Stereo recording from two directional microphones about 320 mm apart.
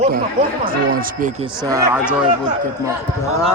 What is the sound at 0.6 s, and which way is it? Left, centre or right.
Speech, right.